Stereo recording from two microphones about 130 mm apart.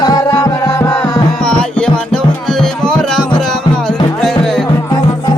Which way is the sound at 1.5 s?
5° left (ahead or behind).